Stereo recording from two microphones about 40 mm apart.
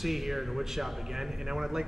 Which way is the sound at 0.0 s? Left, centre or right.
Centre.